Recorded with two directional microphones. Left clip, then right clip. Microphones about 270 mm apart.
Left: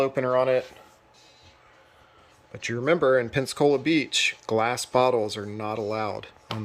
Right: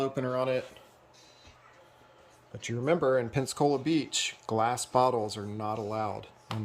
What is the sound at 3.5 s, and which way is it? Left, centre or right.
Speech, centre.